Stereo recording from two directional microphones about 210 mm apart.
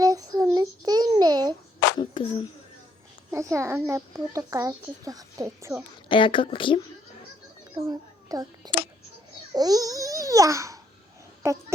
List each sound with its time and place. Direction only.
0.0 s child singing: 15° right (ahead or behind)
2.0 s a sound: 25° left (ahead or behind)
3.3 s a child's voice: 15° right (ahead or behind)
6.1 s speech: 25° left (ahead or behind)
7.8 s a child's voice: 15° right (ahead or behind)
9.5 s babbling: 20° right (ahead or behind)
11.4 s a child's voice: 15° right (ahead or behind)